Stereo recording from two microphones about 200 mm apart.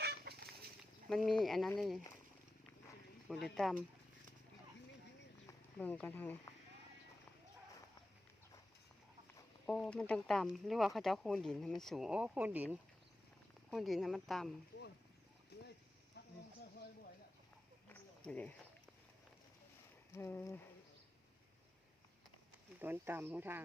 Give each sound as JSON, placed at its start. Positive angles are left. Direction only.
{"t": 0.0, "sound": "fowl", "side_deg": -55}
{"t": 1.1, "sound": "speech", "side_deg": 0}
{"t": 3.2, "sound": "speech", "side_deg": 0}
{"t": 5.5, "sound": "speech", "side_deg": 10}
{"t": 9.6, "sound": "speech", "side_deg": 0}
{"t": 16.2, "sound": "a sound", "side_deg": 55}
{"t": 17.8, "sound": "a sound", "side_deg": 10}
{"t": 20.1, "sound": "a sound", "side_deg": 15}
{"t": 22.8, "sound": "speech", "side_deg": -10}